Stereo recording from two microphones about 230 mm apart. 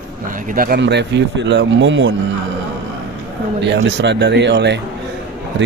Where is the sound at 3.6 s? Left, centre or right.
Right.